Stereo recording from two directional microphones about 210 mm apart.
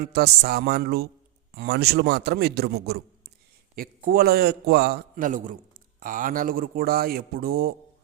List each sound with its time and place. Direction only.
0.0 s a man's voice: 50° right (ahead or behind)